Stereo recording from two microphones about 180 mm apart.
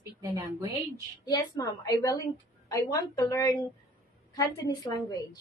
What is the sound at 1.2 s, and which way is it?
A woman's voice, 20° left (ahead or behind).